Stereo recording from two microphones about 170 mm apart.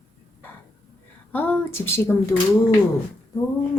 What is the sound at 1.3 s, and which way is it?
Speech, 10° left (ahead or behind).